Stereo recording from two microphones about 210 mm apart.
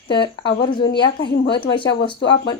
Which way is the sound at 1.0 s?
25° left (ahead or behind).